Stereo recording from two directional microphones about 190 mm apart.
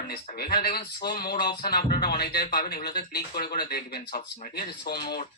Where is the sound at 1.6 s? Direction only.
50° left (ahead or behind).